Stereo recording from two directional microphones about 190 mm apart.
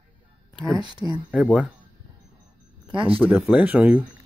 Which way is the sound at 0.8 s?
25° right (ahead or behind).